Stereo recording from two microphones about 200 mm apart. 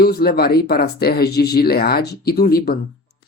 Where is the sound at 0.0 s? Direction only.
50° left (ahead or behind).